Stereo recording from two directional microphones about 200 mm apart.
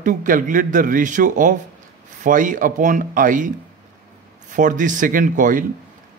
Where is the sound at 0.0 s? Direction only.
40° right (ahead or behind).